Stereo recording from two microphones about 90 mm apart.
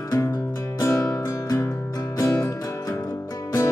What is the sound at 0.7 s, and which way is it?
Music, 35° left (ahead or behind).